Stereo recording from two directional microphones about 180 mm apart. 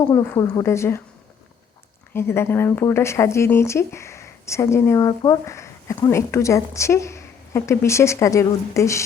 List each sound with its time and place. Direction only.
0.1 s speech: 20° left (ahead or behind)
2.1 s speech: 15° left (ahead or behind)